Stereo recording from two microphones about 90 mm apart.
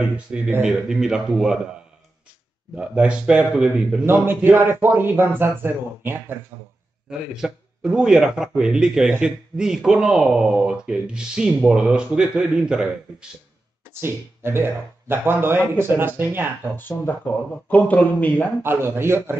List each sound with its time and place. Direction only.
0.0 s speech: 10° right (ahead or behind)
2.7 s speech: 10° right (ahead or behind)
4.0 s speech: 25° right (ahead or behind)
7.1 s speech: 5° right (ahead or behind)
14.0 s speech: 25° right (ahead or behind)
17.0 s speech: 15° left (ahead or behind)
18.6 s speech: 25° right (ahead or behind)